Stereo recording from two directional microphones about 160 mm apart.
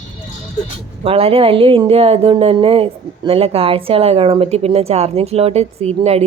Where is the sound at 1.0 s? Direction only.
35° right (ahead or behind).